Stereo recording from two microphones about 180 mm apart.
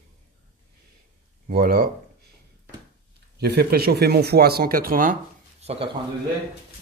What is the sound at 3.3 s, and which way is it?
Speech, 65° right (ahead or behind).